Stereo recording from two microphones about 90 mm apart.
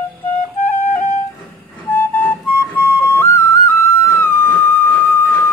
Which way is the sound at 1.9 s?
20° left (ahead or behind).